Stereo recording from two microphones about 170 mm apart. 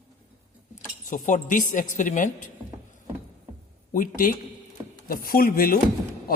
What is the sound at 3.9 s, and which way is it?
A man's voice, 55° left (ahead or behind).